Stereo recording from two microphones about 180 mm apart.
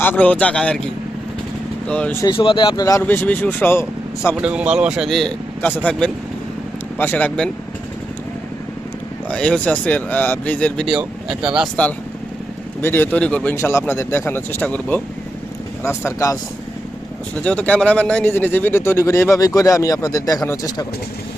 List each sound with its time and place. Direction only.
0.0 s speech: 10° left (ahead or behind)
1.9 s speech: 5° left (ahead or behind)
2.2 s speech: 30° left (ahead or behind)
3.0 s speech: 10° left (ahead or behind)
4.4 s a man's voice: 5° right (ahead or behind)
9.3 s speech: 5° left (ahead or behind)
12.8 s speech: 10° left (ahead or behind)